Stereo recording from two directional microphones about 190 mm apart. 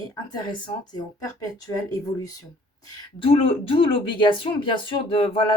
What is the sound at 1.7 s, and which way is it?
Speech, 20° left (ahead or behind).